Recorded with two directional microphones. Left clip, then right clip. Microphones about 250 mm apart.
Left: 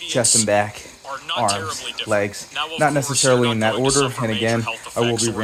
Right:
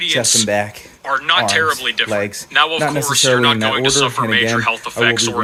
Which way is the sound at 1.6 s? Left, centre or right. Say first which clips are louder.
Right 11 dB; right.